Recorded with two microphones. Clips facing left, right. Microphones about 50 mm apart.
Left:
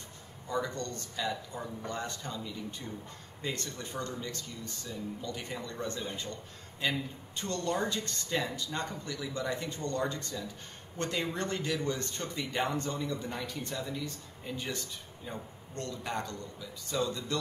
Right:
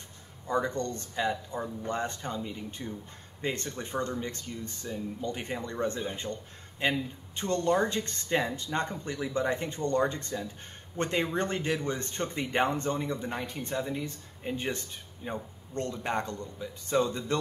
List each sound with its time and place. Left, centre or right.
0.5 s speech: right